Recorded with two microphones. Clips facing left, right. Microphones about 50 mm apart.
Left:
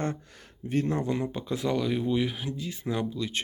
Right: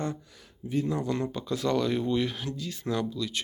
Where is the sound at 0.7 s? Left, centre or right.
Left.